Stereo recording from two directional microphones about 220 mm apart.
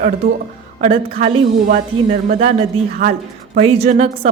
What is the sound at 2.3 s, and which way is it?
A woman's voice, 35° right (ahead or behind).